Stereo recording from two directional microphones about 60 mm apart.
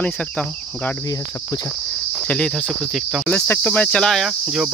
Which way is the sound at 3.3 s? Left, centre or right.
Left.